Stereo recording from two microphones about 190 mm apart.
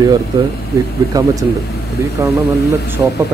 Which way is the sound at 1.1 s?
20° right (ahead or behind).